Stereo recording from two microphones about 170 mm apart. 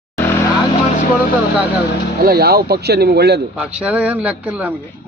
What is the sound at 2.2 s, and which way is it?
A man's voice, 65° right (ahead or behind).